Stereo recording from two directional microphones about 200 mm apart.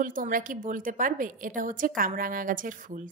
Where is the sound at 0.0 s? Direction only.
40° right (ahead or behind).